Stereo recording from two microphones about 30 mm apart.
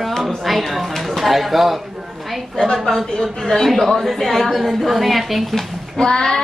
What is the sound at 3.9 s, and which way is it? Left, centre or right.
A woman's voice, centre.